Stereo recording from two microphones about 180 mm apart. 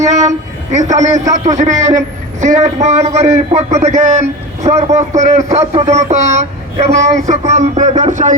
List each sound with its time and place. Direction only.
0.0 s a man's voice: 40° right (ahead or behind)
1.1 s a man's voice: 15° right (ahead or behind)
1.5 s a man's voice: 40° right (ahead or behind)